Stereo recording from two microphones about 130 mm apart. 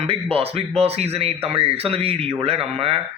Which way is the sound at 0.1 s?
50° right (ahead or behind).